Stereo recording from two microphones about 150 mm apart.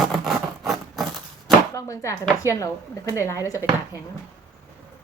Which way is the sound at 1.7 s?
20° left (ahead or behind).